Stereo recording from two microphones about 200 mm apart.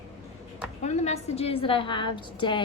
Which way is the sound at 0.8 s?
35° left (ahead or behind).